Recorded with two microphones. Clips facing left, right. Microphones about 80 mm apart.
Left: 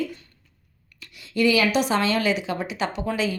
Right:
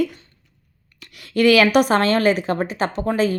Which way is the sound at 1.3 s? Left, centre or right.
Right.